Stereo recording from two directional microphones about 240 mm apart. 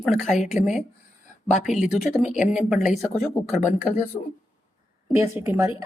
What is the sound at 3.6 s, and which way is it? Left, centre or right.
Speech, left.